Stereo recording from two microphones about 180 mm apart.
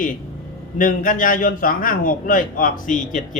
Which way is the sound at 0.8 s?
50° left (ahead or behind).